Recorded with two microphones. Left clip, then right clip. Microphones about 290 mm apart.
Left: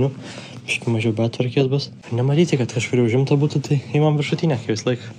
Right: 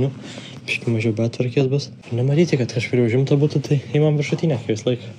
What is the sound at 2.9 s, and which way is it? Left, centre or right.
Speech, centre.